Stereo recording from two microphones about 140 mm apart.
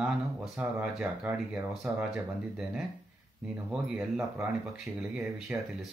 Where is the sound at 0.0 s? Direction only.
10° right (ahead or behind).